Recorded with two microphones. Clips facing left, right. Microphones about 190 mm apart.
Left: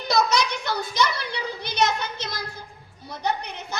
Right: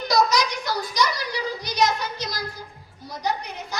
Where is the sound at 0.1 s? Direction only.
25° left (ahead or behind).